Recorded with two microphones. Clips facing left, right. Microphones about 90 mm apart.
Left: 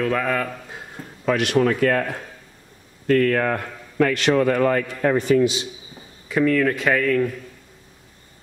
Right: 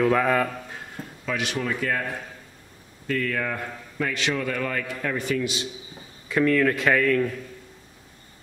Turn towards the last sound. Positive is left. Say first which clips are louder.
# left 1 dB
turn(degrees=0)  # may be behind; listen again after turning